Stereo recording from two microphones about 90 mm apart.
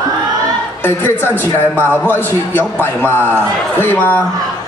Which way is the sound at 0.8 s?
25° left (ahead or behind).